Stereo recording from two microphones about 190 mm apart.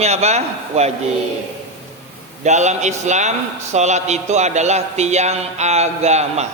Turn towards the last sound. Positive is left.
turn(degrees=-35)  # may be behind; listen again after turning